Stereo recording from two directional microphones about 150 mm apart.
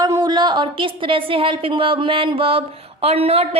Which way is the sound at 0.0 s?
25° right (ahead or behind).